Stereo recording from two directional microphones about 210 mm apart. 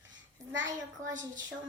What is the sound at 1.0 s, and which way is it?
Speech, 35° right (ahead or behind).